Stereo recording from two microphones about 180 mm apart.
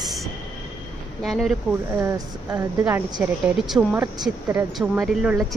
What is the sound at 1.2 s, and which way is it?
Speech, centre (ahead or behind).